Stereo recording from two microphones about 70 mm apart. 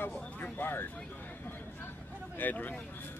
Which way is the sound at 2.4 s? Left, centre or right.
Left.